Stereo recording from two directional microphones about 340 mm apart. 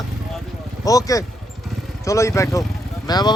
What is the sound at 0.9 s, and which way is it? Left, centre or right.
A man's voice, centre.